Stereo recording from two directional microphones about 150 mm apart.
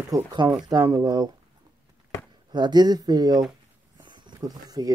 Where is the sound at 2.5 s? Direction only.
30° right (ahead or behind).